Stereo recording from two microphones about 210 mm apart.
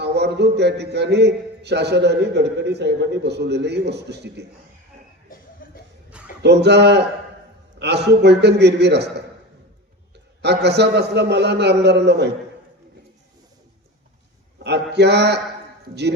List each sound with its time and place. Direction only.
0.0 s a man's voice: 55° right (ahead or behind)
6.4 s a man's voice: 55° right (ahead or behind)
10.4 s a man's voice: 55° right (ahead or behind)
14.6 s a man's voice: 55° right (ahead or behind)